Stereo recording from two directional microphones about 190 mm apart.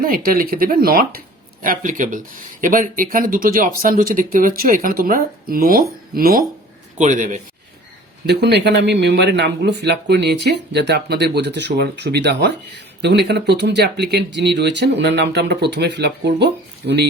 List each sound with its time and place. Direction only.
0.0 s a man's voice: 50° right (ahead or behind)
8.3 s speech: 60° right (ahead or behind)